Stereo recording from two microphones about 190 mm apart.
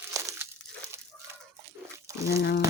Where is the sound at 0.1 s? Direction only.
15° right (ahead or behind).